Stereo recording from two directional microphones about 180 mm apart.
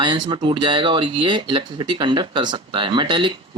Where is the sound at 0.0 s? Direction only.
25° right (ahead or behind).